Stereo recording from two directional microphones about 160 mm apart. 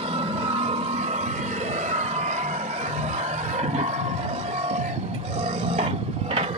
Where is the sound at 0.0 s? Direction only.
40° right (ahead or behind).